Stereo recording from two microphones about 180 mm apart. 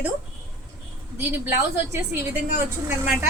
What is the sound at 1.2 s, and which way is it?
Speech, 10° right (ahead or behind).